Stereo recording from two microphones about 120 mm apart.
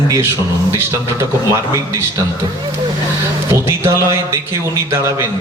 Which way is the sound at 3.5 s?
20° right (ahead or behind).